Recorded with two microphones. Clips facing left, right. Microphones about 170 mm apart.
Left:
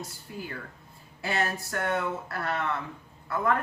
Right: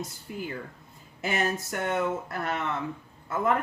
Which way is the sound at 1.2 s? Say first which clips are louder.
Right 2 dB; 20° right (ahead or behind).